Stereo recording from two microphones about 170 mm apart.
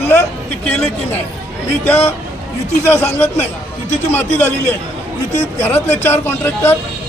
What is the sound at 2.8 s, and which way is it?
A man's voice, 15° left (ahead or behind).